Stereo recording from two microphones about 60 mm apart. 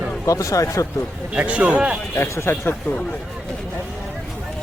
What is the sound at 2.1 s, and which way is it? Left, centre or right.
Speech, left.